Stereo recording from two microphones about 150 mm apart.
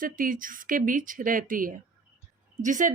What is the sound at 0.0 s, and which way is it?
Speech, 65° right (ahead or behind).